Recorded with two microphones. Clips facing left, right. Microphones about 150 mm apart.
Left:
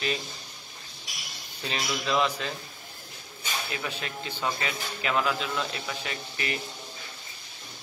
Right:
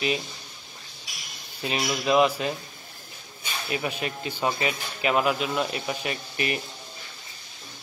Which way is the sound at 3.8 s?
15° right (ahead or behind).